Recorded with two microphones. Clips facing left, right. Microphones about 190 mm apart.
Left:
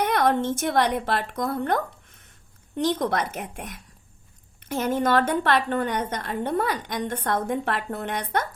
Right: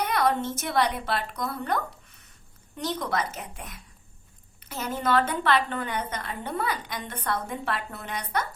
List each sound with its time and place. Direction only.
0.0 s a woman's voice: 50° left (ahead or behind)
2.9 s a woman's voice: 50° left (ahead or behind)